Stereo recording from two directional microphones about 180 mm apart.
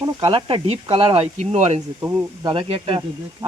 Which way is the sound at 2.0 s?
15° right (ahead or behind).